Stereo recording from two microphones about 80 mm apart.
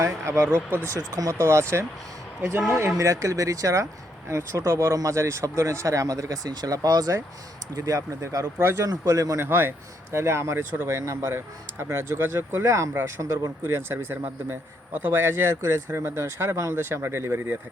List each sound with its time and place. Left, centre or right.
0.0 s speech: right
0.9 s speech: right
3.0 s speech: right
7.8 s speech: right
8.5 s speech: right
8.8 s speech: right
10.6 s speech: right
10.8 s speech: right